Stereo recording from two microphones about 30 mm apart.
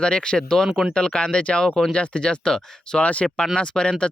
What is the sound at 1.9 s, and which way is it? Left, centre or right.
Speech, left.